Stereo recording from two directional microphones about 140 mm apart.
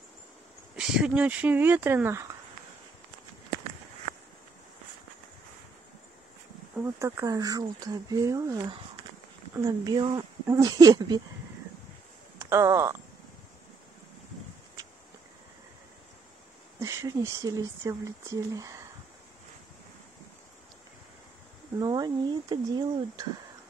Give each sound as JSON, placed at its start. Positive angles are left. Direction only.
{"t": 0.7, "sound": "speech", "side_deg": -5}
{"t": 6.8, "sound": "speech", "side_deg": -20}
{"t": 12.4, "sound": "speech", "side_deg": -20}
{"t": 16.8, "sound": "speech", "side_deg": -20}
{"t": 21.7, "sound": "speech", "side_deg": -30}